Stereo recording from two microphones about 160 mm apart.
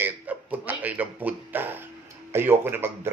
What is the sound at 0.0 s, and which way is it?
Music, 10° right (ahead or behind).